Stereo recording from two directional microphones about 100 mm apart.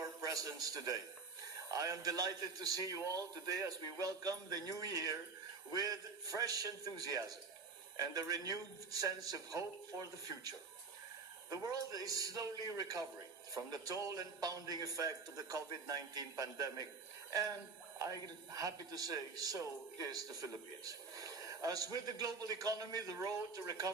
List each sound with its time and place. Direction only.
0.2 s a man's voice: 35° right (ahead or behind)
18.0 s a man's voice: 35° right (ahead or behind)